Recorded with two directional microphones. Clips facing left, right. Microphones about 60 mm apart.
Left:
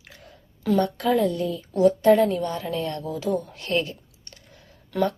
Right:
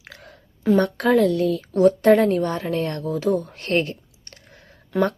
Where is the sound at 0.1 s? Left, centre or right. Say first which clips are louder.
Right 4 dB; right.